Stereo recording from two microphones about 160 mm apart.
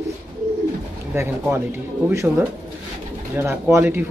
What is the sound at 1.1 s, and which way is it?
Speech, 15° right (ahead or behind).